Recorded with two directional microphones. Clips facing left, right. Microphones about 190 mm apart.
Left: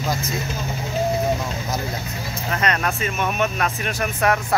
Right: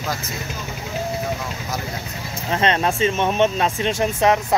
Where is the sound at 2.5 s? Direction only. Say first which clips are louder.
Right 4 dB; 25° right (ahead or behind).